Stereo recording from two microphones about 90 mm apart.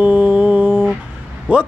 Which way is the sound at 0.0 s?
15° right (ahead or behind).